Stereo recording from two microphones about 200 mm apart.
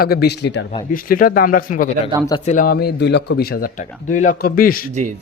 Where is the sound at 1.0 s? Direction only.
45° left (ahead or behind).